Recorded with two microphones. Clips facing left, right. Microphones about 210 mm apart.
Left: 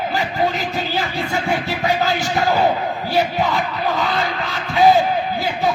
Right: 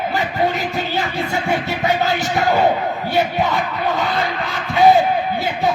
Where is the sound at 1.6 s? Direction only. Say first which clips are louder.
Right 1 dB; 20° right (ahead or behind).